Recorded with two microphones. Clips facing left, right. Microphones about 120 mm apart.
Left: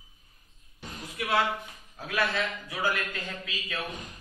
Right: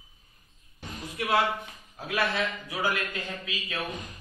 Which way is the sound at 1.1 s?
35° right (ahead or behind).